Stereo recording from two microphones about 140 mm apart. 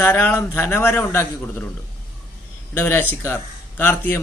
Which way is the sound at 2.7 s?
15° left (ahead or behind).